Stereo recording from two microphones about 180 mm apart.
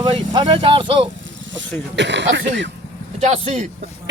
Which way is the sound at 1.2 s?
90° right.